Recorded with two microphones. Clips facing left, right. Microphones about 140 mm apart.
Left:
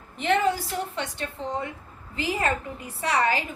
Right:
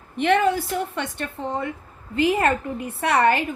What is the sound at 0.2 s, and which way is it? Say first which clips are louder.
A woman's voice: right 4 dB; 60° right (ahead or behind).